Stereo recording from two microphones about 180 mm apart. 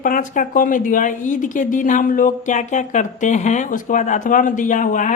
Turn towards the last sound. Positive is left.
turn(degrees=45)  # may be behind; listen again after turning